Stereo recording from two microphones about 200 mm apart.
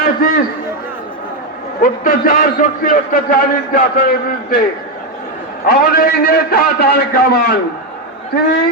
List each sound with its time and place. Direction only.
0.0 s a man's voice: 45° left (ahead or behind)
1.8 s a man's voice: 45° left (ahead or behind)
5.6 s a man's voice: 50° left (ahead or behind)